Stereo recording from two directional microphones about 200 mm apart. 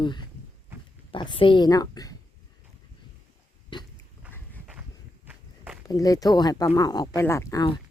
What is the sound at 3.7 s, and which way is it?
Pig, 20° left (ahead or behind).